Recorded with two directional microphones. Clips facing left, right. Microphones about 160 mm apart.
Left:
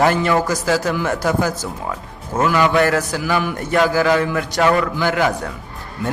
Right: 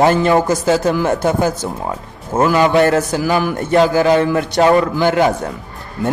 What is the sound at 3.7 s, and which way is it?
A man's voice, 25° right (ahead or behind).